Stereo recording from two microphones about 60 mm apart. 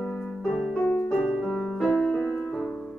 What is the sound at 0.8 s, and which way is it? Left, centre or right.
Music, left.